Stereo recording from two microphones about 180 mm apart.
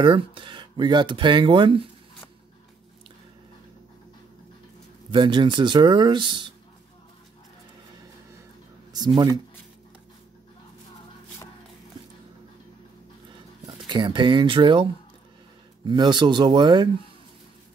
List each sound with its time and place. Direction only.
0.0 s speech: 30° right (ahead or behind)
5.1 s speech: 25° right (ahead or behind)
8.9 s speech: 25° right (ahead or behind)
13.3 s a sound: 25° right (ahead or behind)
15.8 s speech: 25° right (ahead or behind)